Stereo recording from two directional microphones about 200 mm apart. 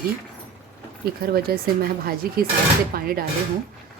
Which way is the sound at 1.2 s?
50° right (ahead or behind).